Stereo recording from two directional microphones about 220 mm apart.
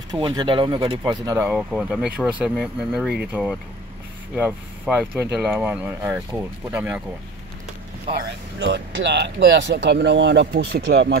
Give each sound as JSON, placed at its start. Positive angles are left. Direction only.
{"t": 0.1, "sound": "speech", "side_deg": -20}
{"t": 1.5, "sound": "speech", "side_deg": 0}
{"t": 8.1, "sound": "speech", "side_deg": -25}
{"t": 8.5, "sound": "speech", "side_deg": -50}